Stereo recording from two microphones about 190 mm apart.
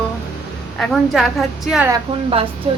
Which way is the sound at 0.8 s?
Centre (ahead or behind).